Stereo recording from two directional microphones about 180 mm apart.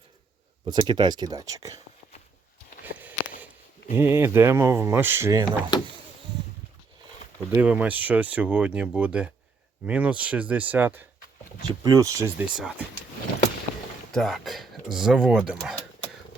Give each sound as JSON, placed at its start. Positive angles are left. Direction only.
{"t": 0.6, "sound": "speech", "side_deg": -25}
{"t": 2.8, "sound": "a sound", "side_deg": -10}
{"t": 3.9, "sound": "speech", "side_deg": -15}
{"t": 7.5, "sound": "speech", "side_deg": -10}
{"t": 12.5, "sound": "speech", "side_deg": -5}
{"t": 14.1, "sound": "speech", "side_deg": 0}